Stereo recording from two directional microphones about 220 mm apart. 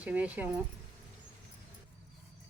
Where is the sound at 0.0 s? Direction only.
5° right (ahead or behind).